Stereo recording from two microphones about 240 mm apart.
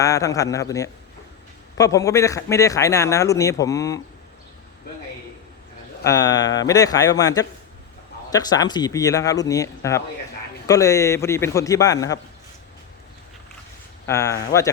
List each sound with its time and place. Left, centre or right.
0.0 s speech: centre
6.0 s speech: centre
14.1 s speech: centre